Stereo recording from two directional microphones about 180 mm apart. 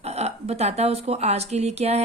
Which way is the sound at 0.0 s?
35° right (ahead or behind).